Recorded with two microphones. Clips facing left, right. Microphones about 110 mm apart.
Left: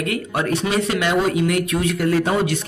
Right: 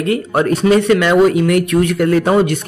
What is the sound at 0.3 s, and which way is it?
A man's voice, 45° right (ahead or behind).